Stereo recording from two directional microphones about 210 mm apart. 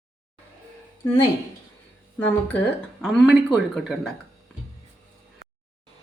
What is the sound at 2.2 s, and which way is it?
Speech, 10° left (ahead or behind).